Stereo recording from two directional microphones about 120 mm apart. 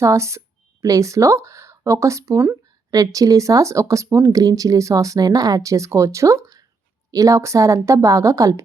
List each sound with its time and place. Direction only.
0.0 s speech: 25° right (ahead or behind)